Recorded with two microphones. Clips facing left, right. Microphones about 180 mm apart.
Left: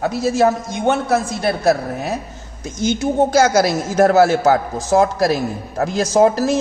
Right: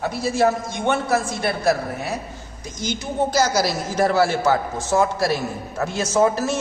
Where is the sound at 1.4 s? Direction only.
45° left (ahead or behind).